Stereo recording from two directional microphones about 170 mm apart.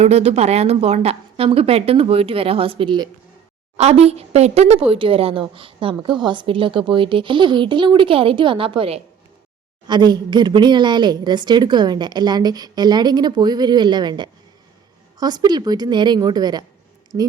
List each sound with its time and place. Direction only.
0.0 s speech: 40° right (ahead or behind)
3.8 s a woman's voice: 40° right (ahead or behind); by 17.3 s 20° right (ahead or behind)